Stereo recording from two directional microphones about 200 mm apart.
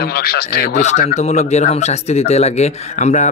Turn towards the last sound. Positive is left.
turn(degrees=35)  # may be behind; listen again after turning